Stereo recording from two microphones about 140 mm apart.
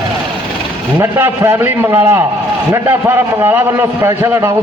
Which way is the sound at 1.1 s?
15° right (ahead or behind).